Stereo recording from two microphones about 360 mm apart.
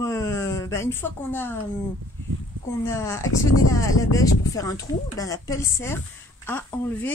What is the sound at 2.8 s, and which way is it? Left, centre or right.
Female singing, centre.